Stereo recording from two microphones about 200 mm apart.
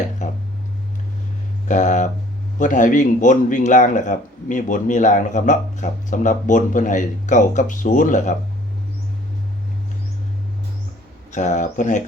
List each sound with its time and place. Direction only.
0.2 s a sound: 40° left (ahead or behind)
1.6 s speech: 40° left (ahead or behind)
11.3 s speech: 35° left (ahead or behind)